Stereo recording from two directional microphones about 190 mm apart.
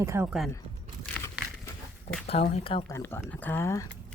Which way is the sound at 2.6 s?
30° left (ahead or behind).